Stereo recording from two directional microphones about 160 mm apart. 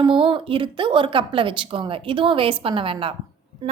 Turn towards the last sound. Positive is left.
turn(degrees=-35)  # may be behind; listen again after turning